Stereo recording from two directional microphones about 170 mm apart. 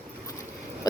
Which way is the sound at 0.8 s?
20° left (ahead or behind).